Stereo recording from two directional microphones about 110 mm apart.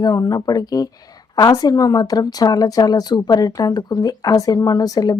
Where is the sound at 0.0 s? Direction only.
35° left (ahead or behind).